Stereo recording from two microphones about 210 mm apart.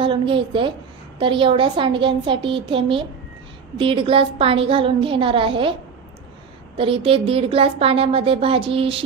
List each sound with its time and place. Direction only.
0.0 s a woman's voice: 25° right (ahead or behind)
6.8 s speech: 25° right (ahead or behind)